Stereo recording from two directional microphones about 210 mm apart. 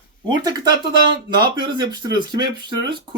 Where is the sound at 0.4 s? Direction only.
20° right (ahead or behind).